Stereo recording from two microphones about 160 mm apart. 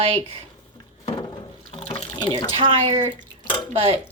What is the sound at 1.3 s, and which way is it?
Water, 35° left (ahead or behind).